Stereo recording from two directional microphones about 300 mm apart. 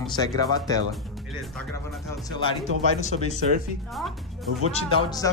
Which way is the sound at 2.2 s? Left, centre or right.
Centre.